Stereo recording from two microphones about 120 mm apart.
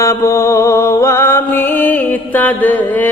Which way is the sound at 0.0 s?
25° left (ahead or behind).